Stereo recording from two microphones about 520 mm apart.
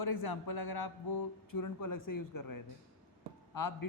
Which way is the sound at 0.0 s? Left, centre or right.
Left.